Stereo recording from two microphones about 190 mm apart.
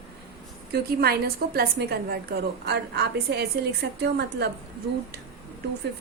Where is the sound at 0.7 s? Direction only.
55° right (ahead or behind).